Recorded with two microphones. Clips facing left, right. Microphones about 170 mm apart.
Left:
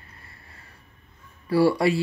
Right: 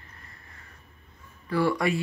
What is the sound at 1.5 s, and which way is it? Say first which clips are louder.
Speech: left 5 dB; 30° left (ahead or behind).